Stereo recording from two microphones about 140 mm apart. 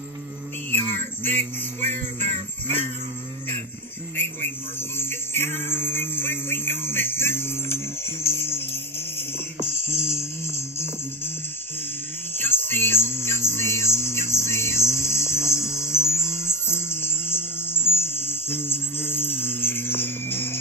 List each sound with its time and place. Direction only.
1.2 s music: 15° left (ahead or behind)
2.1 s music: 55° right (ahead or behind)
4.7 s music: 15° left (ahead or behind)
9.9 s music: 20° left (ahead or behind)
12.4 s music: 15° left (ahead or behind)